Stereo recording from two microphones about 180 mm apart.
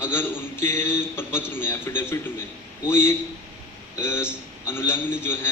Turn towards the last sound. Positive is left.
turn(degrees=15)  # may be behind; listen again after turning